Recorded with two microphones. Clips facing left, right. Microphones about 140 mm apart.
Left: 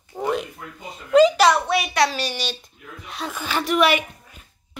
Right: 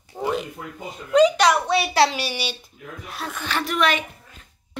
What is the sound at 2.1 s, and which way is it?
A child's voice, 10° right (ahead or behind).